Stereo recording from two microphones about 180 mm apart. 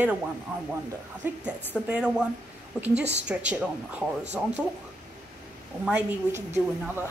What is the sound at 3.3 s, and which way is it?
Speech, 5° right (ahead or behind).